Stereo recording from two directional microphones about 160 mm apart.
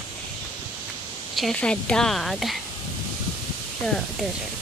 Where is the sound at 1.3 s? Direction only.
5° left (ahead or behind).